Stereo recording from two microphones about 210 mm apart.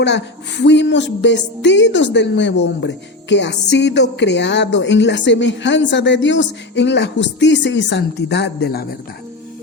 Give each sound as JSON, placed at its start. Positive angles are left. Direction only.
{"t": 0.0, "sound": "a woman's voice", "side_deg": 55}